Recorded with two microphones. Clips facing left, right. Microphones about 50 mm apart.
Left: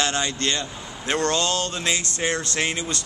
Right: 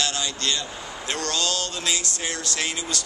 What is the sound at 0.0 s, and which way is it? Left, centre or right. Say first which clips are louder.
A man's voice: left 3 dB; left.